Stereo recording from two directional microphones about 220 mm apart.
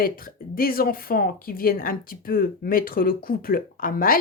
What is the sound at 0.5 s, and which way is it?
Speech, 40° left (ahead or behind).